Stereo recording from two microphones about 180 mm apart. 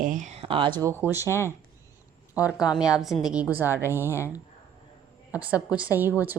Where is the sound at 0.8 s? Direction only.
15° right (ahead or behind).